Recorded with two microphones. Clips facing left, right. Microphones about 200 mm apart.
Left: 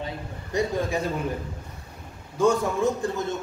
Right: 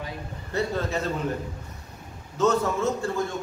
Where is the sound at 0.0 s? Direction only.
15° left (ahead or behind).